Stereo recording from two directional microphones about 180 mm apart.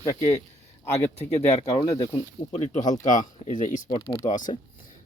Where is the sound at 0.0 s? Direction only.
15° left (ahead or behind).